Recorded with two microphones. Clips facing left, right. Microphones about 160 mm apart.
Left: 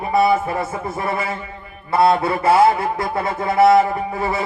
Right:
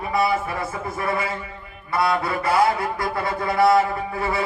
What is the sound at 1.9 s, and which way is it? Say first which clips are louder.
Music: left 6 dB; 25° left (ahead or behind).